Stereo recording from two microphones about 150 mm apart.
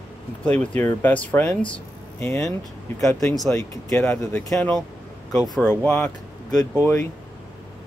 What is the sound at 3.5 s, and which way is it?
Speech, 20° left (ahead or behind).